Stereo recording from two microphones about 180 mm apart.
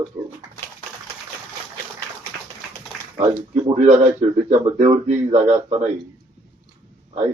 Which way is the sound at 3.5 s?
35° right (ahead or behind).